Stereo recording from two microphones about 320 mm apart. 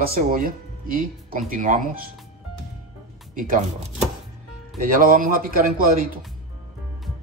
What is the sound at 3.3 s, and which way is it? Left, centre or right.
Speech, right.